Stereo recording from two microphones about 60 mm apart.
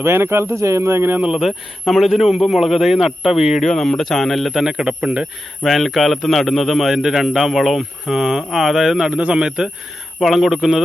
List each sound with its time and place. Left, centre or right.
0.0 s speech: right
1.3 s a man's voice: centre
5.2 s a man's voice: centre